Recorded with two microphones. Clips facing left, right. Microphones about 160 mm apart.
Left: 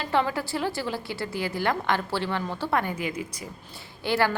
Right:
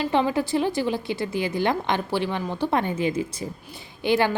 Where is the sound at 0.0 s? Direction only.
20° right (ahead or behind).